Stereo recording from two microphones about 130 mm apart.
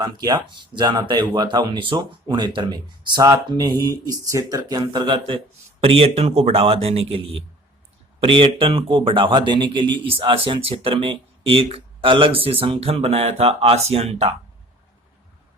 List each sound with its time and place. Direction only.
0.0 s speech: 30° right (ahead or behind)
5.8 s speech: 50° right (ahead or behind)